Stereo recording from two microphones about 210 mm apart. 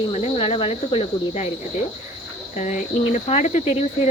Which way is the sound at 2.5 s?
35° left (ahead or behind).